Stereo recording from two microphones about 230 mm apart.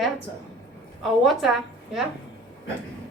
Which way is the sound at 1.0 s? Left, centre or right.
Centre.